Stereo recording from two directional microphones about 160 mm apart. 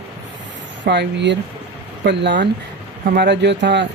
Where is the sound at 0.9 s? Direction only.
90° right.